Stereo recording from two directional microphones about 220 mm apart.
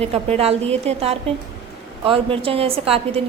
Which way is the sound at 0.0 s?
30° right (ahead or behind).